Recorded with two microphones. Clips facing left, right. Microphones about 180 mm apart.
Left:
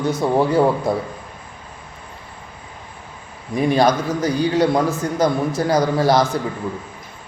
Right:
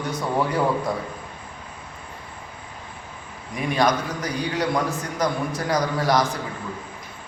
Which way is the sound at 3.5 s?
30° left (ahead or behind).